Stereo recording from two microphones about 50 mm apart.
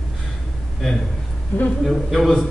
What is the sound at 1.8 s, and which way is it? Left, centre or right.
Speech, centre.